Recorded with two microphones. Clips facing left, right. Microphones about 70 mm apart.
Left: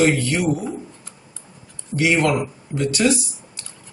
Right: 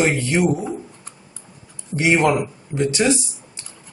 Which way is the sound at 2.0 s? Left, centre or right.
Right.